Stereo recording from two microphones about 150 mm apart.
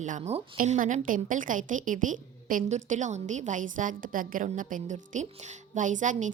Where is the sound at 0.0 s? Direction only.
50° right (ahead or behind).